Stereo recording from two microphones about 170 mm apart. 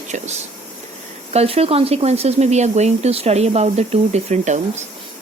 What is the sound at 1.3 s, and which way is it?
Speech, 35° right (ahead or behind).